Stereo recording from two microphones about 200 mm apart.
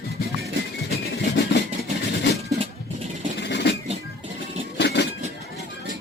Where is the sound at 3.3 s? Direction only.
55° left (ahead or behind).